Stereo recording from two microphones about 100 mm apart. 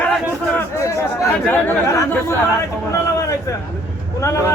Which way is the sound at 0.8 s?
30° left (ahead or behind).